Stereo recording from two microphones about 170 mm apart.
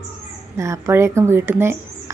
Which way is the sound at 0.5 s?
15° right (ahead or behind).